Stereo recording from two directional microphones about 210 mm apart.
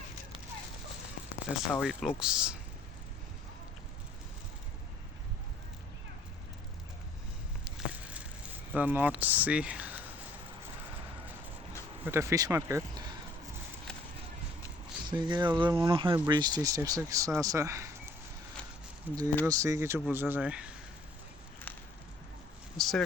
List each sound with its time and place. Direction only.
1.7 s speech: centre (ahead or behind)
7.6 s a sound: 5° right (ahead or behind)
8.7 s speech: 10° right (ahead or behind)
12.0 s speech: 15° right (ahead or behind)
15.0 s speech: 20° right (ahead or behind)
19.0 s speech: 15° right (ahead or behind)
21.7 s a sound: 10° left (ahead or behind)
22.8 s speech: centre (ahead or behind)